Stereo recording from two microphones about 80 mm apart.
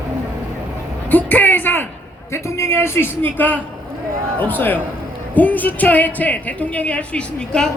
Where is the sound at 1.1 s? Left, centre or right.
Left.